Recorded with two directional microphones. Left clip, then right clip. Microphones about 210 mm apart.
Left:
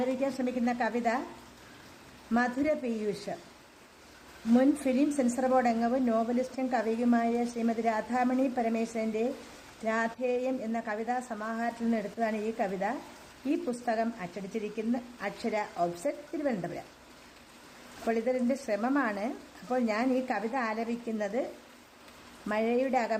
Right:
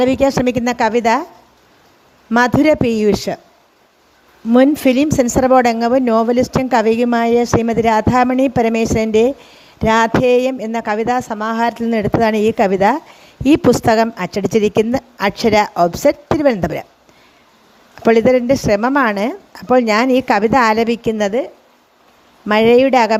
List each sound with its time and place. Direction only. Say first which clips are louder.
0.0 s speech: right 17 dB; 50° right (ahead or behind)
2.3 s speech: right 17 dB; 45° right (ahead or behind)
4.5 s speech: right 15 dB; 45° right (ahead or behind)
18.0 s speech: right 18 dB; 45° right (ahead or behind)
22.4 s speech: right 19 dB; 50° right (ahead or behind)